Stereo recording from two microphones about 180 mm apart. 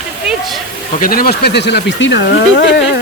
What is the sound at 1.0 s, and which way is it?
Speech, 55° left (ahead or behind).